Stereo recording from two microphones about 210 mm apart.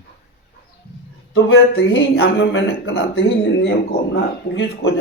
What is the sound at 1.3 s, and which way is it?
Speech, 65° left (ahead or behind).